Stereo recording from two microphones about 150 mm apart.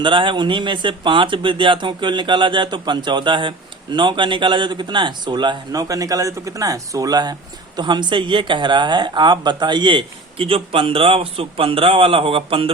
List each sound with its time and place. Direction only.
0.0 s speech: 35° right (ahead or behind)